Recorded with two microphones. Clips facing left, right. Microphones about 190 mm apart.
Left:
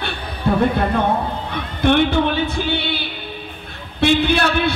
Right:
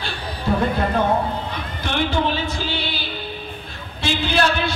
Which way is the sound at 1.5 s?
60° left (ahead or behind).